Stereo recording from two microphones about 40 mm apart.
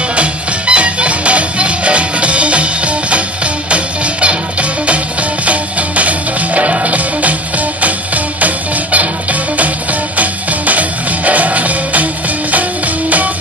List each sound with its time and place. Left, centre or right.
0.1 s music: right